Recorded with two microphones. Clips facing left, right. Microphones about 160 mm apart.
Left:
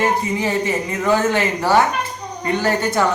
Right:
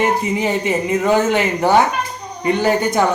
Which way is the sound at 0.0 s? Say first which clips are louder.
Right 2 dB; 20° right (ahead or behind).